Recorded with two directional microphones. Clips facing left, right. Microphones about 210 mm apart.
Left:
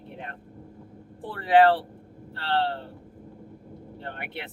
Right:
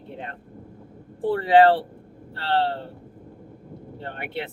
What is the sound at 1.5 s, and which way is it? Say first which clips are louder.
Speech: right 2 dB; 25° right (ahead or behind).